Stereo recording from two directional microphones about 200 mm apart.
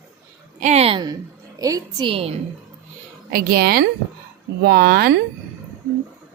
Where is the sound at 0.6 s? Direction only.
35° right (ahead or behind).